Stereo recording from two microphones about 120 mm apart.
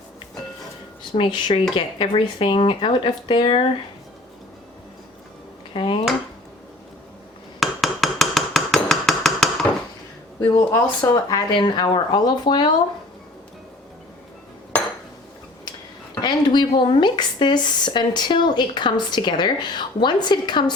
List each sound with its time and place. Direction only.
1.1 s speech: 45° left (ahead or behind)
5.7 s dishes: 45° left (ahead or behind)
7.6 s a sound: centre (ahead or behind)
10.7 s speech: 20° left (ahead or behind)
11.1 s speech: 35° left (ahead or behind)
16.2 s speech: 40° left (ahead or behind)